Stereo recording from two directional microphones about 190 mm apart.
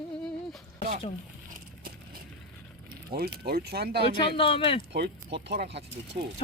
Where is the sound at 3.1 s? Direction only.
55° right (ahead or behind).